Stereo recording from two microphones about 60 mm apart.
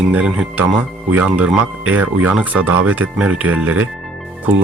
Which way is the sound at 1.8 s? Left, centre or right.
Right.